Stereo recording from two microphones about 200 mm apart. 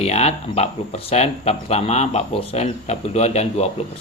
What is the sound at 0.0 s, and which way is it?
Speech, 30° left (ahead or behind).